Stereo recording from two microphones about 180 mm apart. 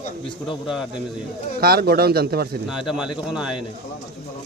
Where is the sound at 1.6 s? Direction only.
60° right (ahead or behind).